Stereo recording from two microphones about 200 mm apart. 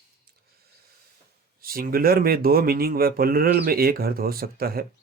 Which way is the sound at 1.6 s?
45° right (ahead or behind).